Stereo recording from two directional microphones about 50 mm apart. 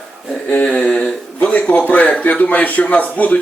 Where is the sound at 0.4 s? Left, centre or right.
Left.